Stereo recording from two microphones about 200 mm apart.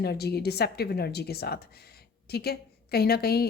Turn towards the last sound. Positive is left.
turn(degrees=50)  # may be behind; listen again after turning